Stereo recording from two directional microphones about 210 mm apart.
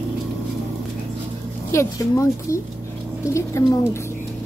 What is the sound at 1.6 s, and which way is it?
Speech, 15° left (ahead or behind).